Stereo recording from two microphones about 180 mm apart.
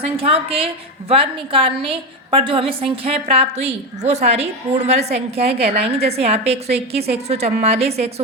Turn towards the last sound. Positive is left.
turn(degrees=-35)  # may be behind; listen again after turning